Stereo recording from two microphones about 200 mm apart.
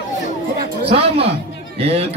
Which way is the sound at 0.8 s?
30° right (ahead or behind).